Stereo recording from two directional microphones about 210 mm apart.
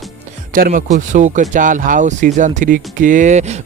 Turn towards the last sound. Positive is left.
turn(degrees=-35)  # may be behind; listen again after turning